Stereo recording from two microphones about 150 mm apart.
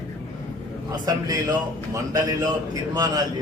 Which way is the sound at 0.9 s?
25° right (ahead or behind).